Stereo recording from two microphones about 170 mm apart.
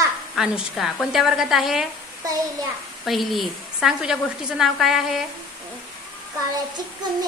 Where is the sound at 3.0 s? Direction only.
Centre (ahead or behind).